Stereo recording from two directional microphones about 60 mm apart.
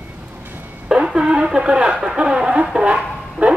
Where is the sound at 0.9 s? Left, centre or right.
Centre.